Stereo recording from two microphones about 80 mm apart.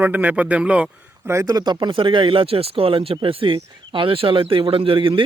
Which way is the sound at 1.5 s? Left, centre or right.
Right.